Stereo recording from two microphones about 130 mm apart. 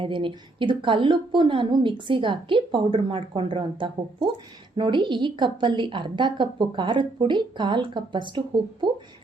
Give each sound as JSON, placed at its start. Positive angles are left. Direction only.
{"t": 0.0, "sound": "a woman's voice", "side_deg": -40}